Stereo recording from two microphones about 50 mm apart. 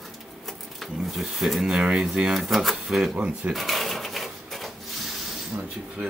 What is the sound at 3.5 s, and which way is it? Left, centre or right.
Drawer open or close, centre.